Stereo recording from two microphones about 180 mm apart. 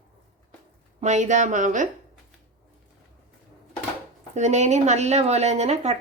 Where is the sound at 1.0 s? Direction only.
40° right (ahead or behind).